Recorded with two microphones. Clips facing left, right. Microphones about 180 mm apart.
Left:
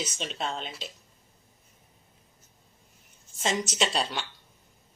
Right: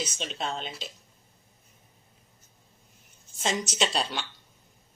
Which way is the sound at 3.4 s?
Centre (ahead or behind).